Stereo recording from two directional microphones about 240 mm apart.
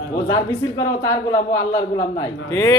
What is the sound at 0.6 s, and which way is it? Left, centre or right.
A woman's voice, centre.